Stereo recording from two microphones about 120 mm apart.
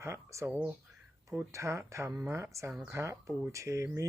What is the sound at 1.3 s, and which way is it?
Speech, 25° right (ahead or behind).